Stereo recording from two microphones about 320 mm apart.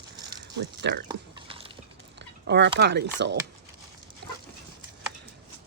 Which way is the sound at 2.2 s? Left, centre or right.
Right.